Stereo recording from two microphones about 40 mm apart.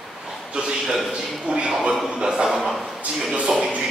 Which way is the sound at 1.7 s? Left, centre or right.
Centre.